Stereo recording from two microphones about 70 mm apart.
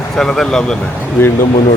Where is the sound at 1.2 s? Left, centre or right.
Left.